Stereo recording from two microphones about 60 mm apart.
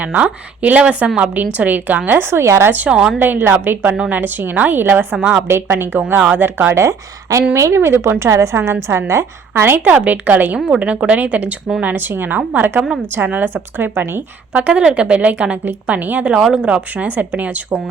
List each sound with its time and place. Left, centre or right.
0.0 s speech: right
2.0 s a woman's voice: right
2.6 s speech: right
2.9 s speech: centre
3.2 s a woman's voice: right
5.2 s speech: centre
5.5 s a woman's voice: right
6.7 s a woman's voice: right
8.2 s a woman's voice: right
9.7 s a woman's voice: right
14.5 s speech: centre
16.3 s speech: centre
16.9 s speech: right